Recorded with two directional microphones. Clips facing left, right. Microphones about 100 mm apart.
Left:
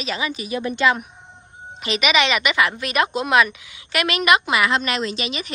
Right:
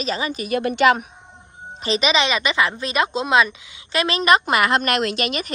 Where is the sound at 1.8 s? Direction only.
30° right (ahead or behind).